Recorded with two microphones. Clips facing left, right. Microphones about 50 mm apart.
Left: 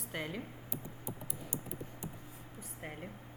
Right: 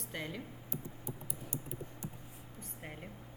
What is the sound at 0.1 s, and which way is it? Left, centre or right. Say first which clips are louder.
Speech: left 2 dB; centre.